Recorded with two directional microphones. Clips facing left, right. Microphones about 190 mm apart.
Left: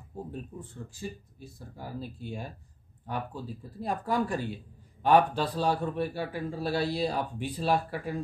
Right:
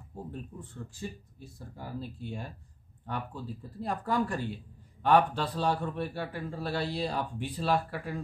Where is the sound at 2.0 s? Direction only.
10° left (ahead or behind).